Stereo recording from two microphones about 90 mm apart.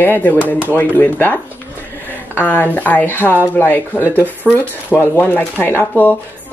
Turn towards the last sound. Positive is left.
turn(degrees=25)  # may be behind; listen again after turning